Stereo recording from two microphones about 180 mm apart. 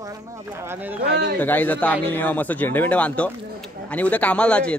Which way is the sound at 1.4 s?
10° left (ahead or behind).